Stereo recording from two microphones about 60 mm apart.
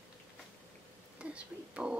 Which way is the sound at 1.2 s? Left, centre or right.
Centre.